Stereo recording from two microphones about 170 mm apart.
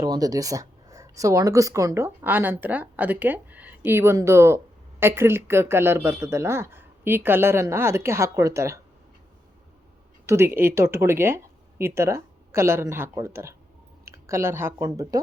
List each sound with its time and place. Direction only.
0.0 s speech: 20° right (ahead or behind)
10.2 s speech: 15° right (ahead or behind)
14.0 s a sound: 15° right (ahead or behind)
14.8 s speech: 20° right (ahead or behind)